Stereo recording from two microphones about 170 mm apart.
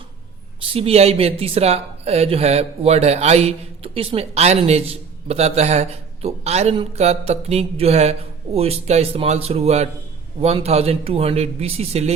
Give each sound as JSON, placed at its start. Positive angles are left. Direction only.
{"t": 0.6, "sound": "speech", "side_deg": -35}